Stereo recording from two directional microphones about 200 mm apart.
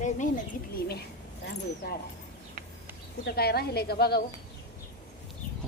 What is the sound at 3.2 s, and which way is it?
Speech, 50° left (ahead or behind).